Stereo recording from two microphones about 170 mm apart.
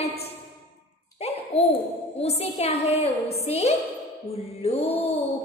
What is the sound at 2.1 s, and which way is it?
A woman's voice, 35° left (ahead or behind).